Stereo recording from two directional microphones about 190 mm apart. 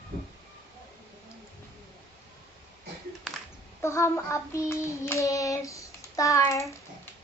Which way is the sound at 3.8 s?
15° left (ahead or behind).